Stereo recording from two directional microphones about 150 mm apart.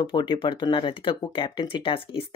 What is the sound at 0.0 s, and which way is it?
Speech, 30° left (ahead or behind).